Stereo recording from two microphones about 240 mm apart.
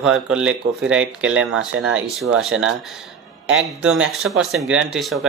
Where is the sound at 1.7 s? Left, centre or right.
Right.